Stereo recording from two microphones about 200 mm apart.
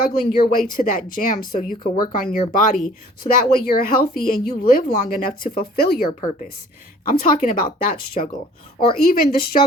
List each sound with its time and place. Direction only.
0.0 s speech: 45° left (ahead or behind)
6.1 s a woman's voice: 40° left (ahead or behind)